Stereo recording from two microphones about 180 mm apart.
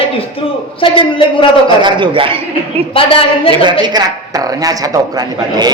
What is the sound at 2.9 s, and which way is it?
Speech, 30° left (ahead or behind).